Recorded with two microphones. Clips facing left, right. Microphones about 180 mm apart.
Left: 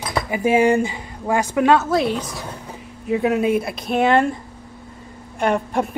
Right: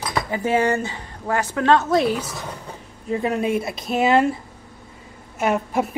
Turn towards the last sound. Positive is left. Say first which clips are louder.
# left 1 dB
turn(degrees=-5)  # may be behind; listen again after turning